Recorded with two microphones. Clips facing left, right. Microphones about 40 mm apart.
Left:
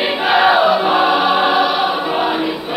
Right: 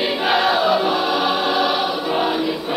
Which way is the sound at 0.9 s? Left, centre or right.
Left.